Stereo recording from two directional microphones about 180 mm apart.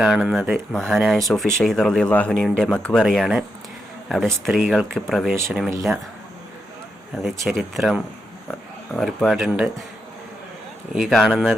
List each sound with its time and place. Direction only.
0.0 s speech: centre (ahead or behind)
4.4 s speech: centre (ahead or behind)
7.2 s speech: centre (ahead or behind)
10.9 s speech: centre (ahead or behind)